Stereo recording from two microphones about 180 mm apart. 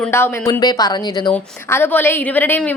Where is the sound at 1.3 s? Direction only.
10° left (ahead or behind).